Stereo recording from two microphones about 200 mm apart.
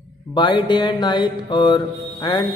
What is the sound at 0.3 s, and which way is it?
A man's voice, 20° left (ahead or behind).